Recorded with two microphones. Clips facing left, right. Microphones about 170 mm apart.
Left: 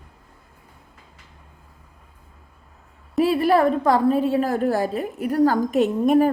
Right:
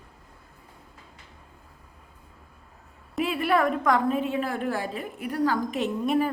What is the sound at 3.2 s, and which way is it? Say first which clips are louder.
A woman's voice: left 6 dB; 35° left (ahead or behind).